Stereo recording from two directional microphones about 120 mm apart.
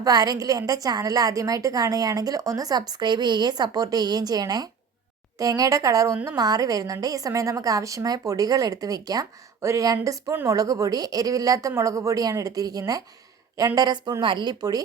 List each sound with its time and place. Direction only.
0.0 s a woman's voice: 30° right (ahead or behind)